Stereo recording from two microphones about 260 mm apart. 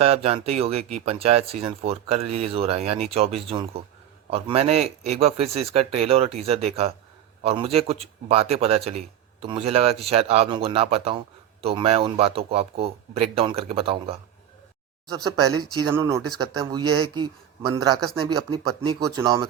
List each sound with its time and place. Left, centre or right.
0.0 s a man's voice: right